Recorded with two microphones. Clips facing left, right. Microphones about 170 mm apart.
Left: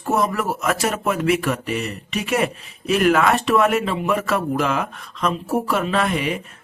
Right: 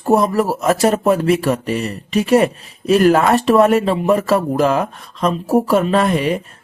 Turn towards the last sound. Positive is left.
turn(degrees=-35)  # may be behind; listen again after turning